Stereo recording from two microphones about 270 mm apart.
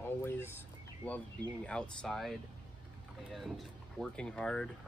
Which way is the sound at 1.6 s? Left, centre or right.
Centre.